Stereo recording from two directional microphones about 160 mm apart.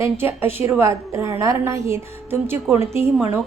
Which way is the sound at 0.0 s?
15° right (ahead or behind).